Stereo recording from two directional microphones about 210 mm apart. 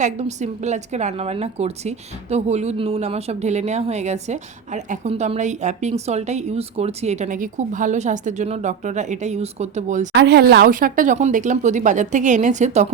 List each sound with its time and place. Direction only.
0.0 s a woman's voice: 35° right (ahead or behind)
10.1 s a woman's voice: 55° right (ahead or behind); by 12.9 s 35° right (ahead or behind)